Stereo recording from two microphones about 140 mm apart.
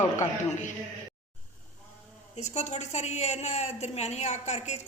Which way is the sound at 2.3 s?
55° left (ahead or behind).